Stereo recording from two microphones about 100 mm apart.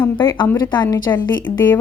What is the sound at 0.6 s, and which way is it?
Speech, 45° left (ahead or behind).